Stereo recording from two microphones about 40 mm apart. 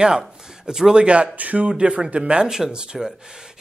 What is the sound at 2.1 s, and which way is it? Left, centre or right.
Speech, right.